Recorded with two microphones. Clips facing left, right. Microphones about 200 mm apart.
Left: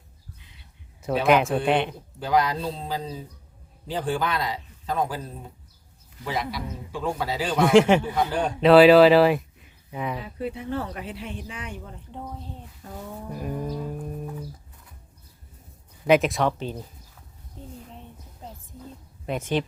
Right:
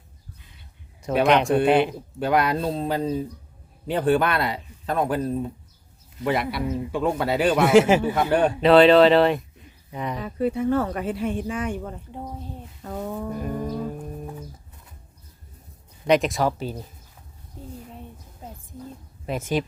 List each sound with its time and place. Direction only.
1.3 s speech: 5° left (ahead or behind)
2.1 s a man's voice: 60° right (ahead or behind)
7.7 s speech: 5° right (ahead or behind)
8.0 s a man's voice: 65° right (ahead or behind)
8.6 s speech: 5° left (ahead or behind)
10.2 s speech: 45° right (ahead or behind)
12.8 s a man's voice: 60° right (ahead or behind)
13.4 s music: centre (ahead or behind)
16.0 s speech: centre (ahead or behind)
18.4 s music: 10° right (ahead or behind)
19.2 s speech: 5° right (ahead or behind)